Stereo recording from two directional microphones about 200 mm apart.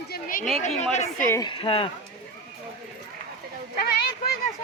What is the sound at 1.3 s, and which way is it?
Speech, 20° left (ahead or behind).